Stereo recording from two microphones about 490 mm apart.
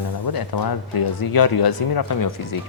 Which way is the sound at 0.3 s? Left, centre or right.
Left.